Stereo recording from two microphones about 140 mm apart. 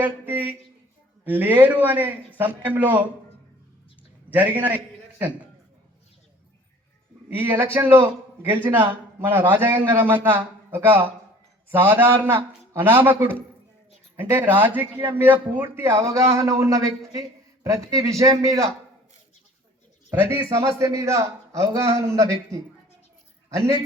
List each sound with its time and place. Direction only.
0.0 s a man's voice: 15° right (ahead or behind)
4.3 s a man's voice: 10° right (ahead or behind)
7.3 s a man's voice: 15° right (ahead or behind)
20.7 s a man's voice: 20° right (ahead or behind)